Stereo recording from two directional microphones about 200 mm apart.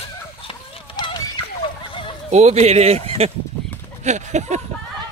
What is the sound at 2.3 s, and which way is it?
Speech, 35° right (ahead or behind).